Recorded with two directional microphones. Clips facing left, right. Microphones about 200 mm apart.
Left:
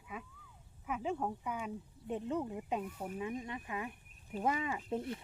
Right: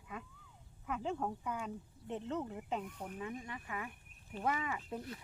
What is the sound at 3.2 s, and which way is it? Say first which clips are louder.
Speech: left 4 dB; 20° left (ahead or behind).